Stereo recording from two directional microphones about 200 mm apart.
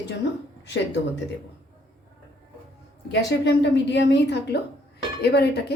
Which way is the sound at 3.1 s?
60° left (ahead or behind).